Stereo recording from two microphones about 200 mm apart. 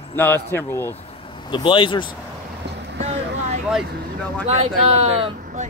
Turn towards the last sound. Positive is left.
turn(degrees=-40)  # may be behind; listen again after turning